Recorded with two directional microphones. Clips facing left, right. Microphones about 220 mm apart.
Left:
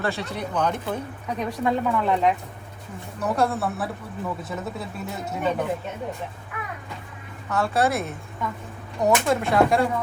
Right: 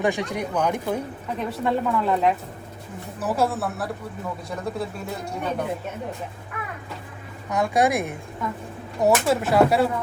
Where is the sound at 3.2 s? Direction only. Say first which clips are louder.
Even; 5° right (ahead or behind).